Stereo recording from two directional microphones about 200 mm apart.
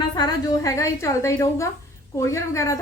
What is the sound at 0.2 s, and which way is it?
A woman's voice, 20° left (ahead or behind).